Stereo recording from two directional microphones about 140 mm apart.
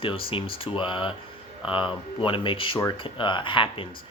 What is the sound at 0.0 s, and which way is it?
Speech, 40° left (ahead or behind).